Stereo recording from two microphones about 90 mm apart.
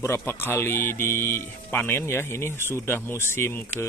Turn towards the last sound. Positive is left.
turn(degrees=25)  # may be behind; listen again after turning